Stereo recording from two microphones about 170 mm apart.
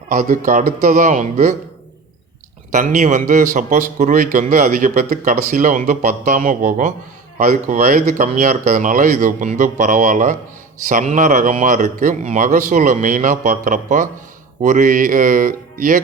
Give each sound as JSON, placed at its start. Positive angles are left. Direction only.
{"t": 0.1, "sound": "a man's voice", "side_deg": -50}
{"t": 2.7, "sound": "a man's voice", "side_deg": -50}